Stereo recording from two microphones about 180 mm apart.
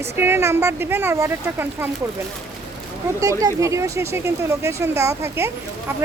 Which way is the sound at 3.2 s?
20° right (ahead or behind).